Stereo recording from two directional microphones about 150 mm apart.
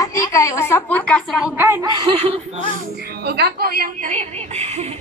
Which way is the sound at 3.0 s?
90° right.